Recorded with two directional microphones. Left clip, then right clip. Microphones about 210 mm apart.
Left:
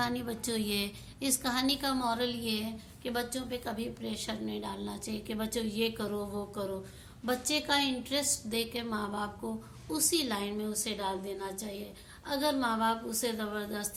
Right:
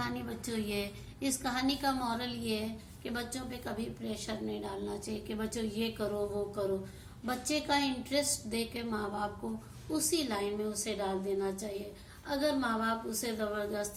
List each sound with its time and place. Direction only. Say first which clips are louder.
0.0 s a woman's voice: left 4 dB; 55° left (ahead or behind)
7.3 s a woman's voice: left 2 dB; 45° left (ahead or behind)